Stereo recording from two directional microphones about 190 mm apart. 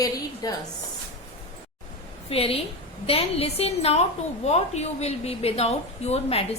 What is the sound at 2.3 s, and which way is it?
A woman's voice, 30° left (ahead or behind).